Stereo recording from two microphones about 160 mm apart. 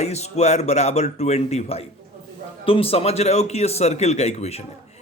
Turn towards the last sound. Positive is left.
turn(degrees=40)  # may be behind; listen again after turning